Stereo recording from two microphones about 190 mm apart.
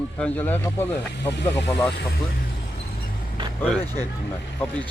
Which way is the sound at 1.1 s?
65° left (ahead or behind).